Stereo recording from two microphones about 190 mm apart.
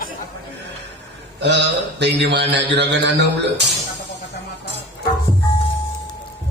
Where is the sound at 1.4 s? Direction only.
65° right (ahead or behind).